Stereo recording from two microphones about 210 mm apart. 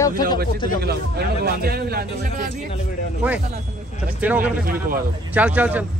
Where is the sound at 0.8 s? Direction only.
50° right (ahead or behind).